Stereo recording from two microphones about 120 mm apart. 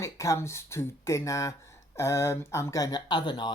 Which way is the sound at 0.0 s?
25° left (ahead or behind).